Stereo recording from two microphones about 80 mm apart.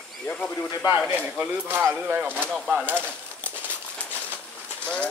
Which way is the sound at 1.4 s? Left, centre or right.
Right.